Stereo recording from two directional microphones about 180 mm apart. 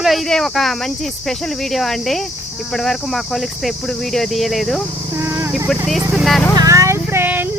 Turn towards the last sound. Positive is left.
turn(degrees=-10)  # may be behind; listen again after turning